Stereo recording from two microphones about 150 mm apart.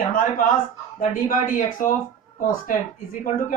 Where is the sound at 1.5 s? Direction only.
65° left (ahead or behind).